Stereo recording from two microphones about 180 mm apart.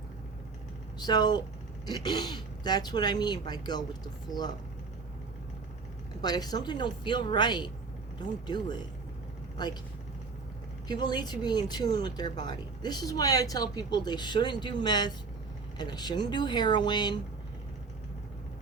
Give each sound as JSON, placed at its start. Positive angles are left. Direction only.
{"t": 0.9, "sound": "speech", "side_deg": 25}
{"t": 6.2, "sound": "speech", "side_deg": 20}
{"t": 10.8, "sound": "speech", "side_deg": 25}